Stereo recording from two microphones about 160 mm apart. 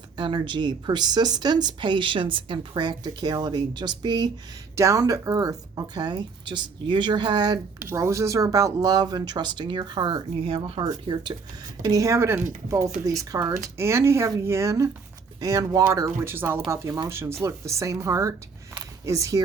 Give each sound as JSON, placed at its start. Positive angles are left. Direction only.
{"t": 0.2, "sound": "speech", "side_deg": -30}